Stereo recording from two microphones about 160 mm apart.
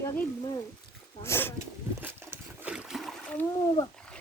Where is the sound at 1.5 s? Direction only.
15° right (ahead or behind).